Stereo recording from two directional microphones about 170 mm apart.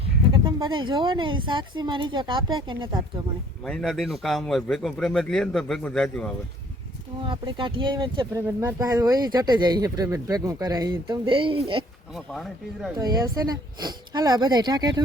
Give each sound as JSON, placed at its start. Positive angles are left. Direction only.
{"t": 0.0, "sound": "speech", "side_deg": -30}
{"t": 3.6, "sound": "speech", "side_deg": 5}
{"t": 7.2, "sound": "speech", "side_deg": -30}
{"t": 12.1, "sound": "speech", "side_deg": 0}
{"t": 13.0, "sound": "speech", "side_deg": -20}